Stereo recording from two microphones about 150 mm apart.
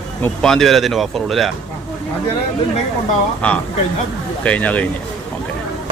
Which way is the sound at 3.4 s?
10° left (ahead or behind).